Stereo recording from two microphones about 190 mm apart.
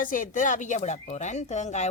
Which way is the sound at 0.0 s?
45° left (ahead or behind).